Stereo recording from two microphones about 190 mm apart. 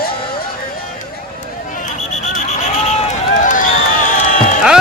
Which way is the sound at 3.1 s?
40° left (ahead or behind).